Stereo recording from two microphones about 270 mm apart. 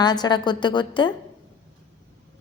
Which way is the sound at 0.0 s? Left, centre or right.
Centre.